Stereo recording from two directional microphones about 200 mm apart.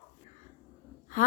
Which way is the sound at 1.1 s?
40° left (ahead or behind).